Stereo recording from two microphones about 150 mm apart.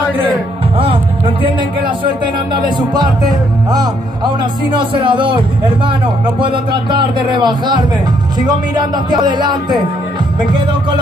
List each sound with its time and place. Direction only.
0.7 s a sound: 35° right (ahead or behind)
2.9 s speech: 25° right (ahead or behind)
6.4 s a man's voice: 35° right (ahead or behind)